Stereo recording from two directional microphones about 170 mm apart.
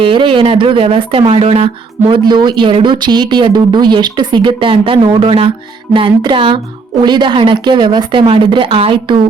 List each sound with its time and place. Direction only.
0.0 s speech: 30° right (ahead or behind)
5.9 s music: 30° right (ahead or behind)
7.0 s speech: 25° right (ahead or behind)